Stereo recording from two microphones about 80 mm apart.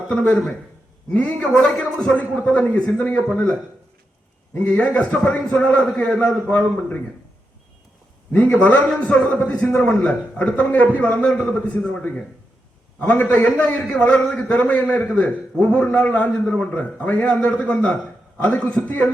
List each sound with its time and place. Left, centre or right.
0.1 s a man's voice: centre
4.5 s a man's voice: centre
8.3 s a man's voice: left
9.0 s a man's voice: centre